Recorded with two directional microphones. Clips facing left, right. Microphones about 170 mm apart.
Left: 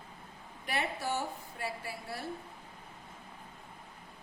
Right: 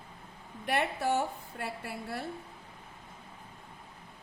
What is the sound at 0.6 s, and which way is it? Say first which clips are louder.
A woman's voice: right 5 dB; 55° right (ahead or behind).